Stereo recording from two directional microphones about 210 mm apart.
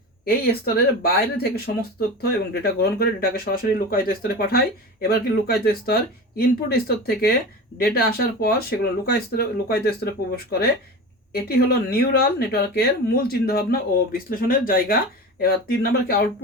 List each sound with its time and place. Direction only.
0.3 s speech: 45° left (ahead or behind)